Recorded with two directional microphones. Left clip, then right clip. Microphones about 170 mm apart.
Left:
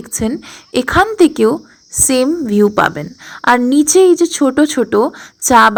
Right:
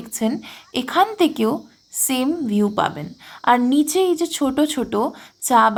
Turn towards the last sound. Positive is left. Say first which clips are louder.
# left 7 dB
turn(degrees=30)  # may be behind; listen again after turning